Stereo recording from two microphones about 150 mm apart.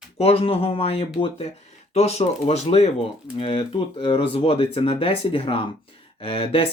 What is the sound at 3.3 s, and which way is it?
Speech, 35° left (ahead or behind).